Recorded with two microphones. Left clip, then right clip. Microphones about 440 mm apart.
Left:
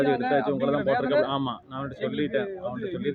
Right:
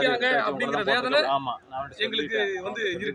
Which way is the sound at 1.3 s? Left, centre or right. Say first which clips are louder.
Right 3 dB; left.